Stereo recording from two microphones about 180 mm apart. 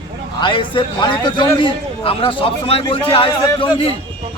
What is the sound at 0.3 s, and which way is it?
A man's voice, 25° left (ahead or behind).